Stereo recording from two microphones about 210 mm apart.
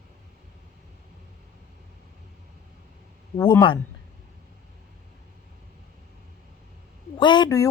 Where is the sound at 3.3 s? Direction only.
20° left (ahead or behind).